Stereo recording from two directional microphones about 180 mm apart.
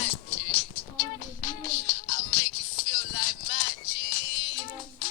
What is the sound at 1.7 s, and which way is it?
Music, 20° left (ahead or behind).